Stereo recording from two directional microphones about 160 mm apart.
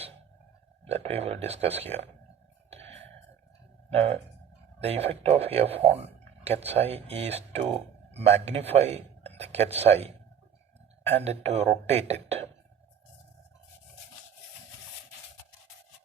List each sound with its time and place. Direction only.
0.9 s speech: 40° right (ahead or behind)
3.8 s speech: 40° right (ahead or behind)
11.1 s speech: 40° right (ahead or behind)